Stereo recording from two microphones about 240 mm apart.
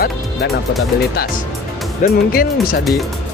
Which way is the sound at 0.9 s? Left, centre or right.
Left.